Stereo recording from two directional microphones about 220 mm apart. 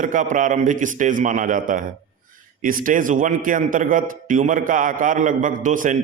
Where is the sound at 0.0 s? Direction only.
35° right (ahead or behind).